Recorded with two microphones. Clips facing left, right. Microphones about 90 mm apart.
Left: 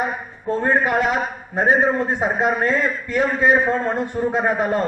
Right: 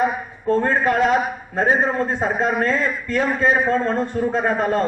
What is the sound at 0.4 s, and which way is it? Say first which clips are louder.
A man's voice: right 1 dB; 15° left (ahead or behind).